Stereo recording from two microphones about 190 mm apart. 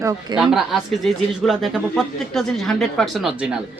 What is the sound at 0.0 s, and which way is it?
Speech, 15° right (ahead or behind).